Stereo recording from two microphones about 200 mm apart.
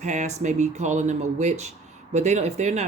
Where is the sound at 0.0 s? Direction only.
35° right (ahead or behind).